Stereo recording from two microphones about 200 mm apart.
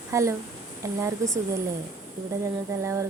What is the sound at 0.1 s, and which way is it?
Speech, 15° right (ahead or behind).